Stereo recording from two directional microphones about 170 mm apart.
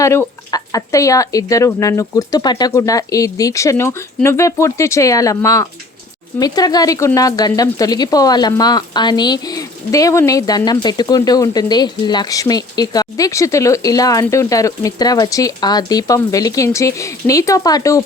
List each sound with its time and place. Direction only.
0.0 s speech: 15° left (ahead or behind)